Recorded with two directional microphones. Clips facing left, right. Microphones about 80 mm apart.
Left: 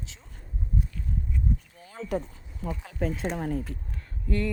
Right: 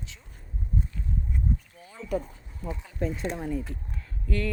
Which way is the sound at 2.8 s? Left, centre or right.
Left.